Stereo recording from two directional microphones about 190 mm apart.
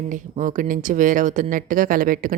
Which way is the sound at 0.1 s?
45° right (ahead or behind).